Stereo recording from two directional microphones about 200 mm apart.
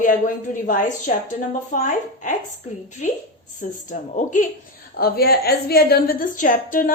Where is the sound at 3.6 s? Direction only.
40° left (ahead or behind).